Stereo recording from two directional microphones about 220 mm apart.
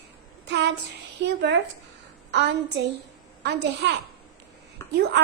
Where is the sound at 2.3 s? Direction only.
50° right (ahead or behind).